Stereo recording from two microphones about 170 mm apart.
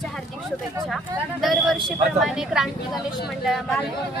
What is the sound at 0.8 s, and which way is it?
Speech, centre (ahead or behind).